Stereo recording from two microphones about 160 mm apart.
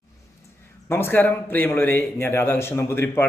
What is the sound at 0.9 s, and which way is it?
A man's voice, 15° left (ahead or behind).